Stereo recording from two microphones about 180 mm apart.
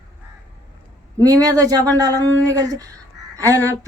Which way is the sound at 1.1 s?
20° right (ahead or behind).